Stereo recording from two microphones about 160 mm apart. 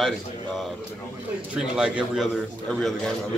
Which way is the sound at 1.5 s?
5° right (ahead or behind).